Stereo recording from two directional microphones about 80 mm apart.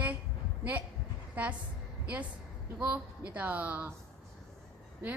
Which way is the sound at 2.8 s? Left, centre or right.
Centre.